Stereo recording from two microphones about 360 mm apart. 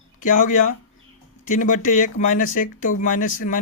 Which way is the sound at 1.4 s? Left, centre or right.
Left.